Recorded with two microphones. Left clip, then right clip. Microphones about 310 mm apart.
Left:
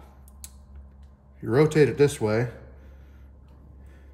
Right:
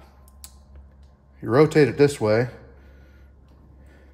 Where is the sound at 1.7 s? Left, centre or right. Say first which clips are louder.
Right 2 dB; right.